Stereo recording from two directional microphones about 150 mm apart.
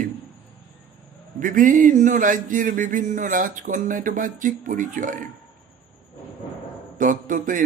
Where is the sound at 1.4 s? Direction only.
65° right (ahead or behind).